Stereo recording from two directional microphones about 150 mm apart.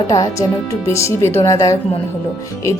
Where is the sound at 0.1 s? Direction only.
20° left (ahead or behind).